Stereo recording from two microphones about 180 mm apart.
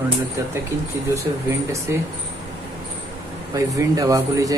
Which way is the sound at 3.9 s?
20° right (ahead or behind).